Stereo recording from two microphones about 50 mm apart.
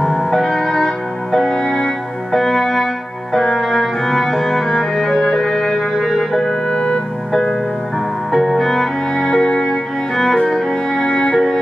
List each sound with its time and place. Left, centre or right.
0.0 s music: centre
5.8 s music: centre
6.3 s music: centre
8.3 s music: centre